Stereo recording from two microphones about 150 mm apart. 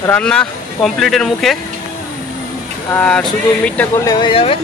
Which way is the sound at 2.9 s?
10° left (ahead or behind).